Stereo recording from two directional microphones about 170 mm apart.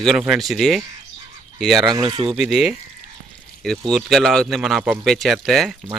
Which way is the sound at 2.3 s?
Centre (ahead or behind).